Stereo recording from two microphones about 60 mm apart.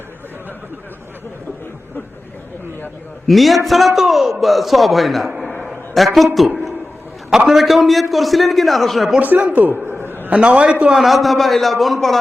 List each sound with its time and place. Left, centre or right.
3.2 s a man's voice: centre
5.6 s a sound: centre
7.3 s a man's voice: centre
9.2 s speech: right
10.2 s speech: right
10.9 s a man's voice: centre